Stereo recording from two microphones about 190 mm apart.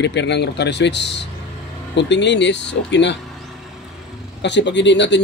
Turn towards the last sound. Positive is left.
turn(degrees=70)  # may be behind; listen again after turning